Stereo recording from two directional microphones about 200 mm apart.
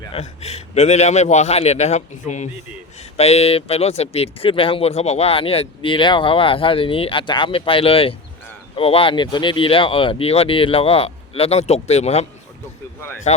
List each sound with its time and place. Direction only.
0.0 s a man's voice: 30° left (ahead or behind)